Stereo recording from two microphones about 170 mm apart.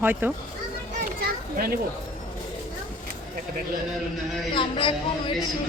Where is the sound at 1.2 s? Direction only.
60° right (ahead or behind).